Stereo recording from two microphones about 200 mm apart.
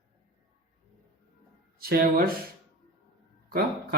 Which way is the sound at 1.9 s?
45° right (ahead or behind).